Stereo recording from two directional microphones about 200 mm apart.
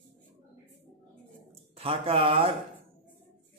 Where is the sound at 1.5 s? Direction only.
30° right (ahead or behind).